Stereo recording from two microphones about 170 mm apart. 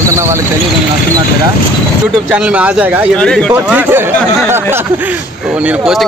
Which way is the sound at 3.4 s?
5° right (ahead or behind).